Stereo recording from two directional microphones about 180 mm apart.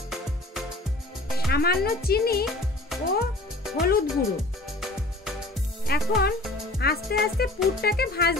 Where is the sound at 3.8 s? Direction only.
60° left (ahead or behind).